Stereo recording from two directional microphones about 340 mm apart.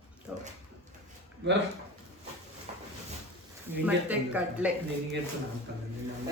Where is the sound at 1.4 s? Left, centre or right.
Right.